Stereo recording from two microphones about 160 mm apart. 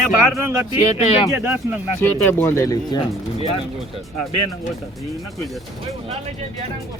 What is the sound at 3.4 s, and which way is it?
Speech, 35° left (ahead or behind).